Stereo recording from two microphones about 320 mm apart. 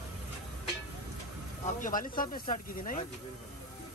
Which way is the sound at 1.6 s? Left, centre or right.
Left.